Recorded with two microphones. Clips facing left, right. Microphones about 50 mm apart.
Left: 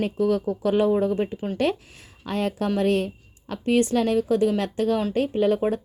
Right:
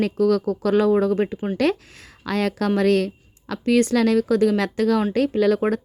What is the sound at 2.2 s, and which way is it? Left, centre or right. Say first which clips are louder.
A woman's voice: right 3 dB; right.